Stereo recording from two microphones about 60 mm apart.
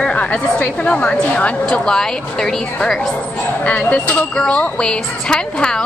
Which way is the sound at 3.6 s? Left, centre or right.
Left.